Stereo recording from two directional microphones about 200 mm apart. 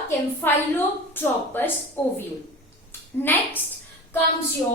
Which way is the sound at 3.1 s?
10° left (ahead or behind).